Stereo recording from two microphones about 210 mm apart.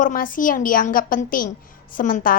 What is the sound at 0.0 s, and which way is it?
A woman's voice, 40° left (ahead or behind).